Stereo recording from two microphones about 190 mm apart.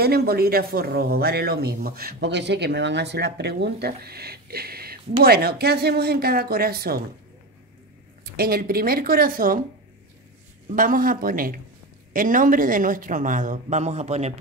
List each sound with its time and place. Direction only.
0.0 s speech: 55° right (ahead or behind)
8.2 s speech: 55° right (ahead or behind)
10.8 s speech: 45° right (ahead or behind)